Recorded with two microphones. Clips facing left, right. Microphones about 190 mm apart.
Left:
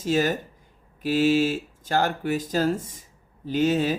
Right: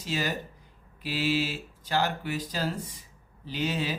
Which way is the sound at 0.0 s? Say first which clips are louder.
Left 8 dB; 50° left (ahead or behind).